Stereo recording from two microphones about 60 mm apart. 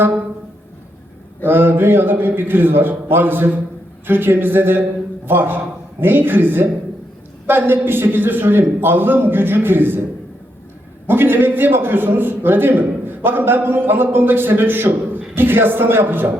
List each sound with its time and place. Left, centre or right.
1.5 s a man's voice: right
11.0 s a man's voice: right